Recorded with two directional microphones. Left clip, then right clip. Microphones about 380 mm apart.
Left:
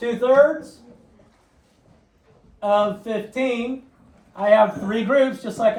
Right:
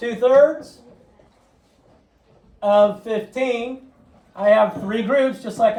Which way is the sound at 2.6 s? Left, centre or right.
Centre.